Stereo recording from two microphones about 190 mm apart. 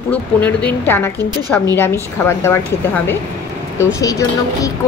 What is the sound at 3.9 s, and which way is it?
Speech, 15° left (ahead or behind).